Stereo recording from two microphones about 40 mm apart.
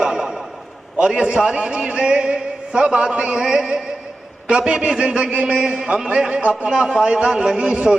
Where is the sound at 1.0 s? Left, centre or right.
Right.